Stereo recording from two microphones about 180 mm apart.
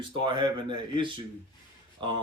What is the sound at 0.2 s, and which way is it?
Speech, 25° right (ahead or behind).